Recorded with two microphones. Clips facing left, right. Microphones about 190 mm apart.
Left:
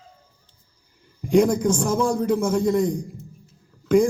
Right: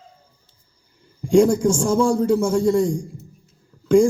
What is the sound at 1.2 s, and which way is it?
Speech, 30° right (ahead or behind).